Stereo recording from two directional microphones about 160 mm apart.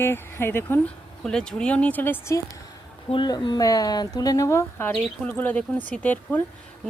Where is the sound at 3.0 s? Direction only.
30° left (ahead or behind).